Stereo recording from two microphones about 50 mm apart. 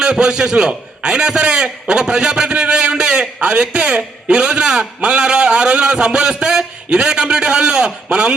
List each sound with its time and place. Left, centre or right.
0.0 s a man's voice: centre